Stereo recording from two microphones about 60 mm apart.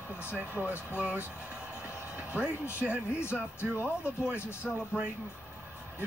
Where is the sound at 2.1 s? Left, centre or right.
Centre.